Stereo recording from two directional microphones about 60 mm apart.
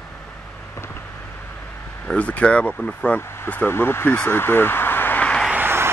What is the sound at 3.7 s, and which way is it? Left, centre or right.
Speech, left.